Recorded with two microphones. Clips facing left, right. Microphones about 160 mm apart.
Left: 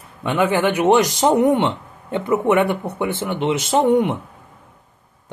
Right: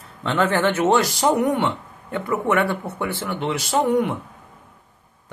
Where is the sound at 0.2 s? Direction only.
10° left (ahead or behind).